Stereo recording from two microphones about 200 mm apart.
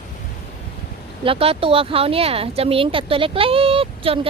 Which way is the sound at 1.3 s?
30° right (ahead or behind).